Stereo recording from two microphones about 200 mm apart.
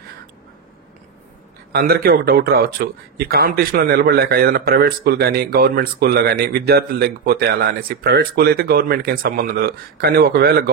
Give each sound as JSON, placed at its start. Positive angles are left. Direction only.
{"t": 1.7, "sound": "speech", "side_deg": -50}